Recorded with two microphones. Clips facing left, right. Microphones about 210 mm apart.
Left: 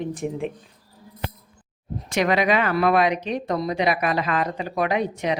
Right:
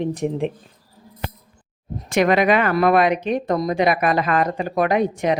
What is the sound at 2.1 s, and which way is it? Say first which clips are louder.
Speech: right 4 dB; 55° right (ahead or behind).